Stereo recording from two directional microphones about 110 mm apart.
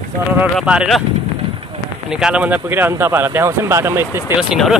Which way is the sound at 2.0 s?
5° right (ahead or behind).